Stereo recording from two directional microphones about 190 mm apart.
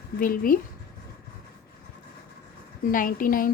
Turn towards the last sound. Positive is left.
turn(degrees=45)  # may be behind; listen again after turning